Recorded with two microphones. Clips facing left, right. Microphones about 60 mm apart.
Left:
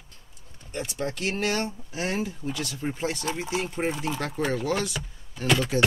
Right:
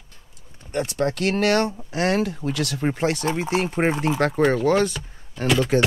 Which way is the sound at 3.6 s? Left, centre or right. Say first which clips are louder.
Right 7 dB; right.